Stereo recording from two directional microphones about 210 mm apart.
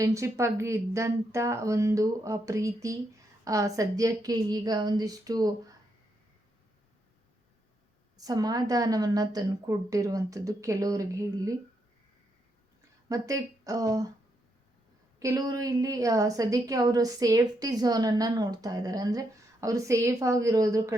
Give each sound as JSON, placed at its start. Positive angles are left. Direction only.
{"t": 0.0, "sound": "a woman's voice", "side_deg": -15}
{"t": 8.2, "sound": "a woman's voice", "side_deg": -20}
{"t": 13.1, "sound": "a woman's voice", "side_deg": -15}
{"t": 15.2, "sound": "a woman's voice", "side_deg": -15}